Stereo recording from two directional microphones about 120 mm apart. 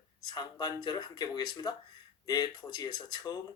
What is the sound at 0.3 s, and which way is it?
Speech, 35° left (ahead or behind).